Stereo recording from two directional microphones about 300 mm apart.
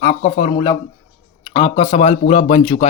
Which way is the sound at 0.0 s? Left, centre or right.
Left.